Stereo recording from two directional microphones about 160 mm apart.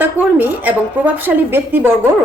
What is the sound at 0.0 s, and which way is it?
Speech, 10° right (ahead or behind).